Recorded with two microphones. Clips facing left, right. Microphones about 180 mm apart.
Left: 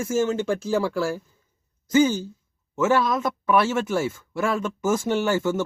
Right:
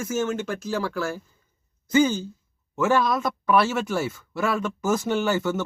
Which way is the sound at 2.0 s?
10° left (ahead or behind).